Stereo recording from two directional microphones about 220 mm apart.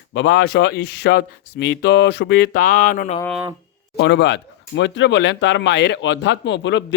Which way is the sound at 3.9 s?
50° left (ahead or behind).